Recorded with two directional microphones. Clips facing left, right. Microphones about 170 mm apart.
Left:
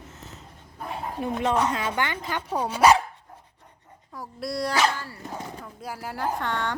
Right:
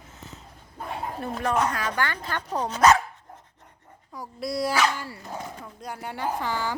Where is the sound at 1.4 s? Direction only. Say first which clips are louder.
Left 1 dB; 25° left (ahead or behind).